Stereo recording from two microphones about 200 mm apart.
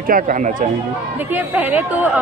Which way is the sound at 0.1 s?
40° right (ahead or behind).